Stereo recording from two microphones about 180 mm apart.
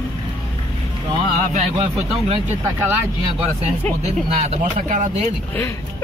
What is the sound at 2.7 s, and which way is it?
Speech, 10° right (ahead or behind).